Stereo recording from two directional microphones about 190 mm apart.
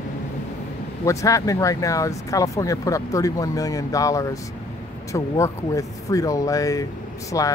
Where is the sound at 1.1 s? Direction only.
15° left (ahead or behind).